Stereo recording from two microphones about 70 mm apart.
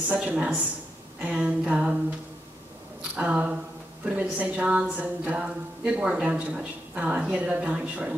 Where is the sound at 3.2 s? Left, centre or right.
Centre.